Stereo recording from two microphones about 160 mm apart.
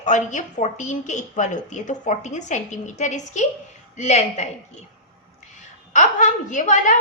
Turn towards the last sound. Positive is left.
turn(degrees=50)  # may be behind; listen again after turning